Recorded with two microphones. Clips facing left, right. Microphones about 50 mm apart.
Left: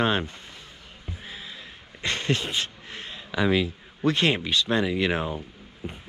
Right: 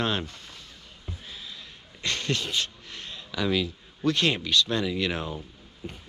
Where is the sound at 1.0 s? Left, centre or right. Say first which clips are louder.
Left 2 dB; left.